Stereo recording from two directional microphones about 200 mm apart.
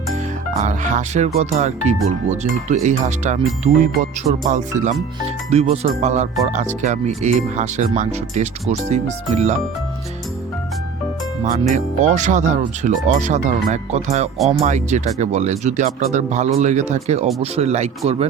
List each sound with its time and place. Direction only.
0.1 s speech: 35° right (ahead or behind)
2.8 s speech: 35° right (ahead or behind)
11.4 s speech: 35° right (ahead or behind)